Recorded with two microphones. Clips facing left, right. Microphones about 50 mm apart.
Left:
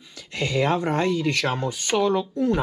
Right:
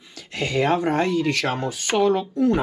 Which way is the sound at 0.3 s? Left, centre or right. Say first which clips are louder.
Right 1 dB; right.